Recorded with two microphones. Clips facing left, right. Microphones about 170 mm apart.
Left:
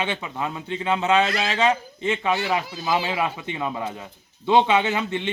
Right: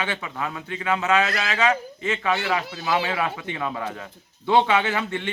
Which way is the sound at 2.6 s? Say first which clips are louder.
Even; 70° right (ahead or behind).